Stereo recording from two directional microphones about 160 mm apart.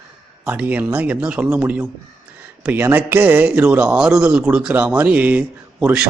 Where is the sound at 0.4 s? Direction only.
10° right (ahead or behind).